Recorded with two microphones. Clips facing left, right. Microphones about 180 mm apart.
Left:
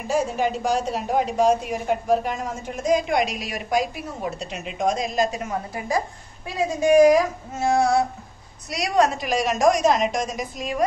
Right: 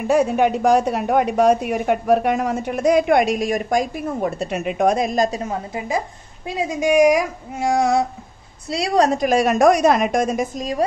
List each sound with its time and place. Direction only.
0.1 s a woman's voice: 60° right (ahead or behind); by 8.0 s 15° right (ahead or behind)
8.6 s a woman's voice: 30° right (ahead or behind)